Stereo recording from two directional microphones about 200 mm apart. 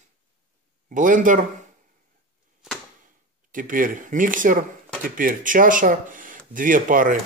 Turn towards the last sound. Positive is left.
turn(degrees=-45)  # may be behind; listen again after turning